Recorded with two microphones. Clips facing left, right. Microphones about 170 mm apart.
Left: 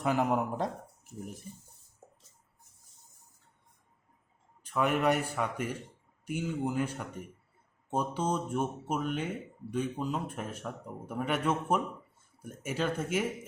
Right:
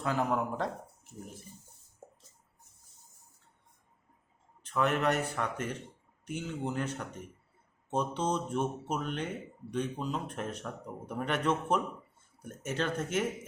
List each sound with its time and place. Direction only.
0.0 s a man's voice: 15° left (ahead or behind)
4.6 s a man's voice: 10° left (ahead or behind)